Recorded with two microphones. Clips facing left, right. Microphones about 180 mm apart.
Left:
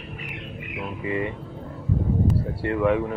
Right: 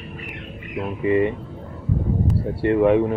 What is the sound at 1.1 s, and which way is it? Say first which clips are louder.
Speech: right 9 dB; 30° right (ahead or behind).